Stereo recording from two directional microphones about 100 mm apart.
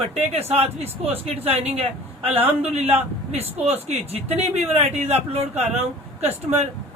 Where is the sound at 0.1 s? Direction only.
90° right.